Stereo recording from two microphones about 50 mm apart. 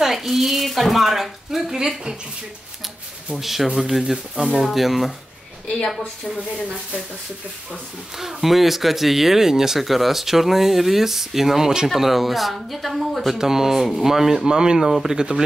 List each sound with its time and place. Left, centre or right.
0.0 s a woman's voice: centre
3.3 s speech: centre
8.2 s speech: centre
14.8 s speech: centre
15.1 s speech: centre